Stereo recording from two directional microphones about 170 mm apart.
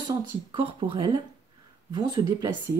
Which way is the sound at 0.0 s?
30° right (ahead or behind).